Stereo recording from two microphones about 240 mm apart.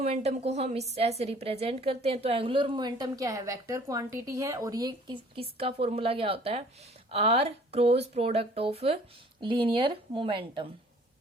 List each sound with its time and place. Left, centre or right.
0.0 s a woman's voice: right